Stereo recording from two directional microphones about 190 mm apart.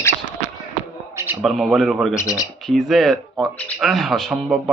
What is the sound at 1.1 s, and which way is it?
A man's voice, 10° right (ahead or behind).